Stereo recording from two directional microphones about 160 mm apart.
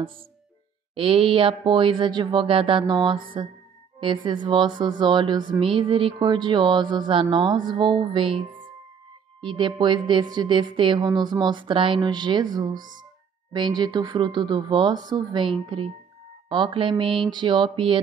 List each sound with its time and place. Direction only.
0.9 s speech: 35° right (ahead or behind)